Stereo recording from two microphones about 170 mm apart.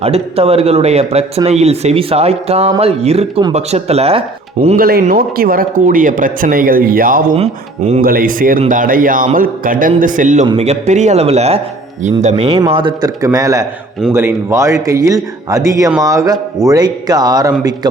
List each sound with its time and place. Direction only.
0.0 s speech: 35° right (ahead or behind)
4.8 s speech: 60° right (ahead or behind)
7.3 s speech: 40° right (ahead or behind)
8.0 s a man's voice: 55° right (ahead or behind); by 12.6 s 35° right (ahead or behind)
12.7 s speech: 25° right (ahead or behind)